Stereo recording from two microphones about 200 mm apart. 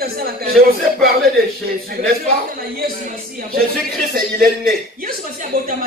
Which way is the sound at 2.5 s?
50° right (ahead or behind).